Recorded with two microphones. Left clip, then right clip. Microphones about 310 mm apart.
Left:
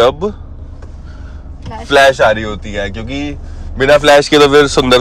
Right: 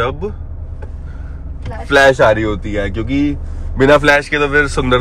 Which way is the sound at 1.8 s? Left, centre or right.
Centre.